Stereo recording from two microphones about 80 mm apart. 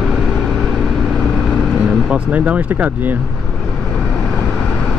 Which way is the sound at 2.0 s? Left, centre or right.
Centre.